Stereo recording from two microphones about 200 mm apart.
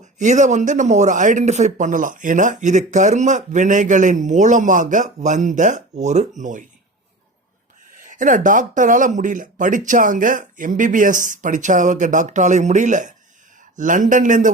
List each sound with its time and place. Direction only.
0.2 s speech: 35° right (ahead or behind)
8.0 s speech: 40° right (ahead or behind)